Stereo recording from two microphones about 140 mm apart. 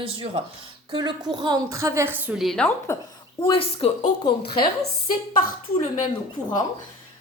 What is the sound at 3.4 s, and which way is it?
Speech, 40° left (ahead or behind).